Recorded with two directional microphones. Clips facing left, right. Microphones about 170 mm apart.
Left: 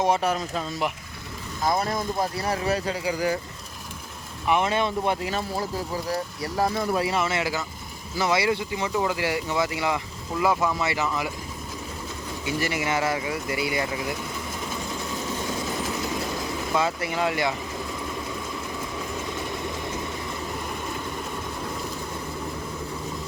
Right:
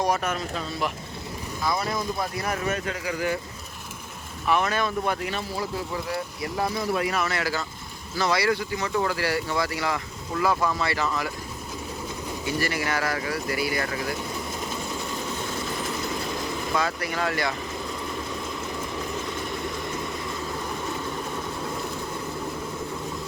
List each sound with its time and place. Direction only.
0.0 s speech: 30° left (ahead or behind)
1.6 s speech: 45° left (ahead or behind)
4.4 s speech: 20° left (ahead or behind)
6.1 s speech: 40° left (ahead or behind)
6.9 s speech: 25° left (ahead or behind)
12.5 s speech: 20° left (ahead or behind)
16.7 s speech: 20° left (ahead or behind)